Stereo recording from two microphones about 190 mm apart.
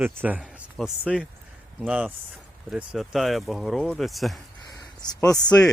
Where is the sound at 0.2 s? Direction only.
5° right (ahead or behind).